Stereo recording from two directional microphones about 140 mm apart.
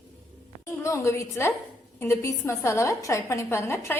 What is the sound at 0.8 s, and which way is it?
A woman's voice, 20° left (ahead or behind).